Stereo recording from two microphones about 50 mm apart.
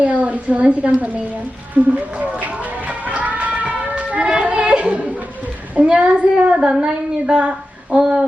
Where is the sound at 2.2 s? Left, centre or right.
Right.